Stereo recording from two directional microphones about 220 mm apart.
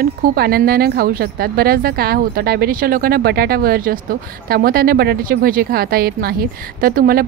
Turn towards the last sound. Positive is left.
turn(degrees=-40)  # may be behind; listen again after turning